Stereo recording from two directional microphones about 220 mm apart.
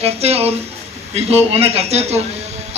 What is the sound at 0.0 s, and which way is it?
A man's voice, 30° right (ahead or behind).